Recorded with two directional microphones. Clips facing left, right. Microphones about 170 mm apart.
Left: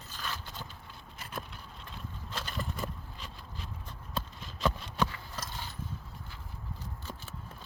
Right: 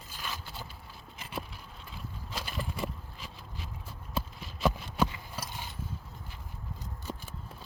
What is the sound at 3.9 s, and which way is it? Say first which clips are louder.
Clip-clop: right 2 dB; 5° right (ahead or behind).